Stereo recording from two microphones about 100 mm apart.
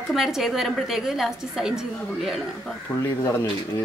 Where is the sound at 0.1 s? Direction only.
5° right (ahead or behind).